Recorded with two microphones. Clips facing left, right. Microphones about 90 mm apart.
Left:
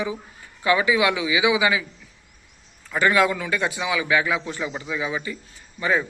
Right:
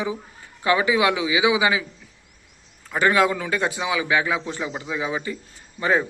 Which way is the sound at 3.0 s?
30° right (ahead or behind).